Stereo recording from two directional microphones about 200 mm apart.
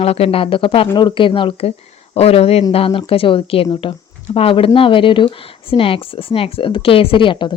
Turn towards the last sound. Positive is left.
turn(degrees=25)  # may be behind; listen again after turning